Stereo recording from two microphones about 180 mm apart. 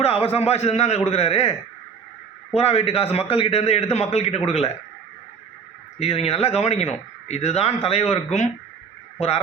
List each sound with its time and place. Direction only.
0.0 s speech: 35° left (ahead or behind)
6.0 s speech: 35° left (ahead or behind)